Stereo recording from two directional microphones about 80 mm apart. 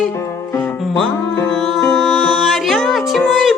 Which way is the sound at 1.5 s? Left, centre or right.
Centre.